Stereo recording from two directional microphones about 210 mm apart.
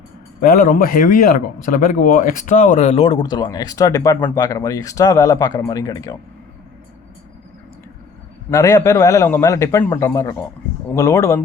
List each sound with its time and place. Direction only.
0.4 s speech: 40° left (ahead or behind); by 6.1 s 15° left (ahead or behind)
8.4 s a man's voice: 15° left (ahead or behind)